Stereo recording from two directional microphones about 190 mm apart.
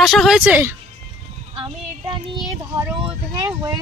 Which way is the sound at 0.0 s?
Centre (ahead or behind).